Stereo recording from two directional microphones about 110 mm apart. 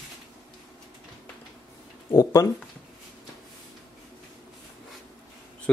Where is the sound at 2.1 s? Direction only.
30° left (ahead or behind).